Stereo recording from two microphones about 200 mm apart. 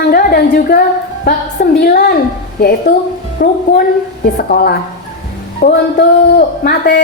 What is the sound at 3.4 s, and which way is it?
A woman's voice, 50° left (ahead or behind).